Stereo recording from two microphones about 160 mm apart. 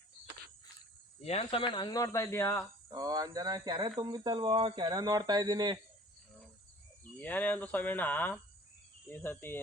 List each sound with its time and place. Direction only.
1.2 s speech: 40° left (ahead or behind); by 2.6 s 15° left (ahead or behind)
2.9 s speech: 25° right (ahead or behind)
7.2 s speech: 10° left (ahead or behind)